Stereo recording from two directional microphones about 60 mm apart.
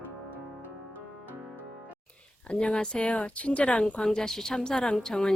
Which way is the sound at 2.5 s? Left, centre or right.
Centre.